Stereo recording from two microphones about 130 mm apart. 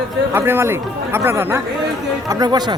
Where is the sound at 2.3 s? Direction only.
30° right (ahead or behind).